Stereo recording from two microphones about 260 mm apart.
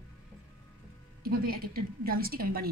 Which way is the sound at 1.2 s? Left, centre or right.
Right.